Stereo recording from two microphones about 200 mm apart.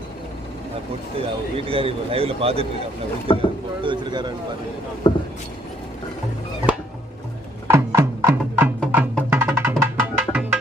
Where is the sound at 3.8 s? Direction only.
25° right (ahead or behind).